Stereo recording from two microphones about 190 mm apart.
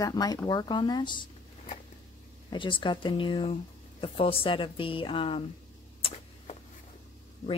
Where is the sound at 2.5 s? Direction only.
25° left (ahead or behind).